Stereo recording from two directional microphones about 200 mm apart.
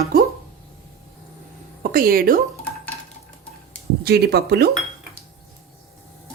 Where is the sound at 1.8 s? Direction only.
45° right (ahead or behind).